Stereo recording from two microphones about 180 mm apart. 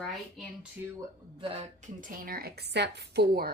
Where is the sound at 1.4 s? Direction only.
35° right (ahead or behind); by 3.5 s 60° right (ahead or behind).